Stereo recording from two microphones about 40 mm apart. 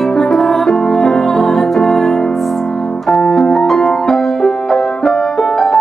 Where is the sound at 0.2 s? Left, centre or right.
Centre.